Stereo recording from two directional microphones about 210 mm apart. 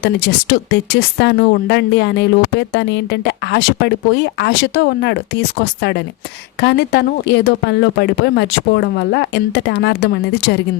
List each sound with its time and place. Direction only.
0.0 s speech: 55° left (ahead or behind)